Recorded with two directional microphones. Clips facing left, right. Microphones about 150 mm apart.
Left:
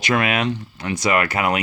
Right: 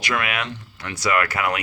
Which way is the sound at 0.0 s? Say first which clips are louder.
Left 6 dB; 25° left (ahead or behind).